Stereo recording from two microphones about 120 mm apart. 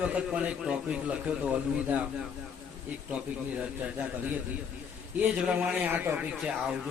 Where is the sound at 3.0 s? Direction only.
10° right (ahead or behind).